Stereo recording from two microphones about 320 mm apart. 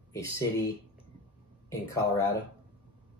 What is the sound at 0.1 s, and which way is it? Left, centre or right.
Speech, centre.